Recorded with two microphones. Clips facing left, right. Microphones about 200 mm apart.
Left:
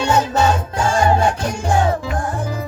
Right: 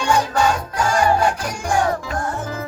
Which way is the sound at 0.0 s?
25° left (ahead or behind).